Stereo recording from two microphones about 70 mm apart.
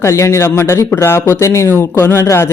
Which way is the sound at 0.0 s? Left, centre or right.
Left.